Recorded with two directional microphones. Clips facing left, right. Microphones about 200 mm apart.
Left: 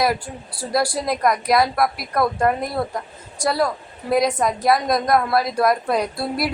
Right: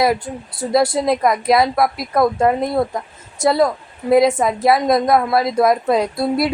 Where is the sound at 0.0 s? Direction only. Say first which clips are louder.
Right 4 dB; 20° right (ahead or behind).